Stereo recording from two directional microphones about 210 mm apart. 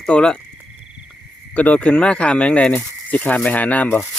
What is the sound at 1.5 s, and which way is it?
Speech, 5° left (ahead or behind).